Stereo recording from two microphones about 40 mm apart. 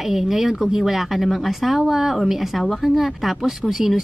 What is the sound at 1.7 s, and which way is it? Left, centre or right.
A woman's voice, right.